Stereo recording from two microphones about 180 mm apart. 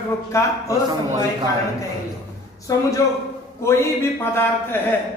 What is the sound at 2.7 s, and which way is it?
Speech, 20° left (ahead or behind).